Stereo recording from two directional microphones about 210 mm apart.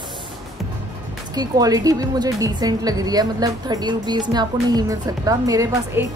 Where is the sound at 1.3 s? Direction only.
20° right (ahead or behind).